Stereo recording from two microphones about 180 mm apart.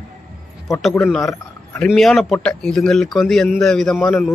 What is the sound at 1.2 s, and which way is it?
Speech, 15° left (ahead or behind).